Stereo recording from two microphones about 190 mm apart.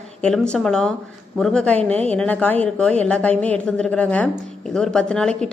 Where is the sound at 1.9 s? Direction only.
35° right (ahead or behind).